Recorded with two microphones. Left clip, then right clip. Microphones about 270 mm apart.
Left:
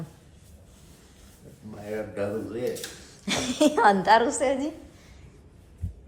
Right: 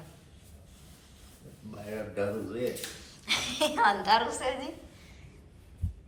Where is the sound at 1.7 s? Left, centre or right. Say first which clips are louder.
Left 5 dB; centre.